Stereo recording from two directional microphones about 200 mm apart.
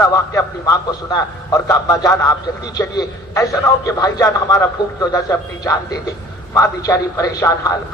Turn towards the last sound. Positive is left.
turn(degrees=15)  # may be behind; listen again after turning